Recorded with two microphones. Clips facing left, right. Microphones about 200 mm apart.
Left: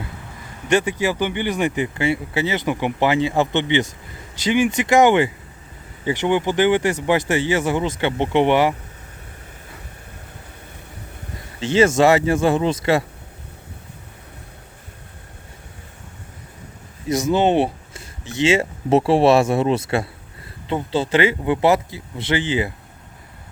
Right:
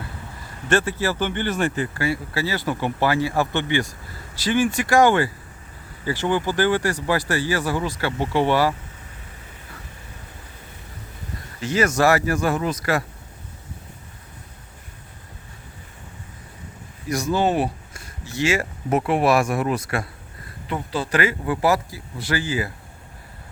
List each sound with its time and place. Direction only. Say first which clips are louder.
0.7 s speech: left 2 dB; 15° left (ahead or behind)
11.6 s speech: left 4 dB; 25° left (ahead or behind)
17.1 s speech: left 4 dB; 20° left (ahead or behind)